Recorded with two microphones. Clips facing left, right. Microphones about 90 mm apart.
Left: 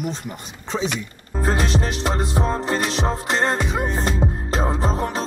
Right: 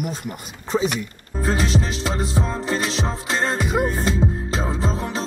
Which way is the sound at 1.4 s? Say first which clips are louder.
Even; 50° left (ahead or behind).